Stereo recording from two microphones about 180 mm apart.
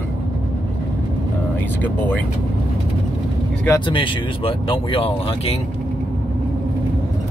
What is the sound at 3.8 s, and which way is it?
Speech, 30° left (ahead or behind).